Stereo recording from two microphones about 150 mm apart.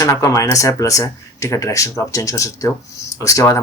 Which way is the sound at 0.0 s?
20° left (ahead or behind).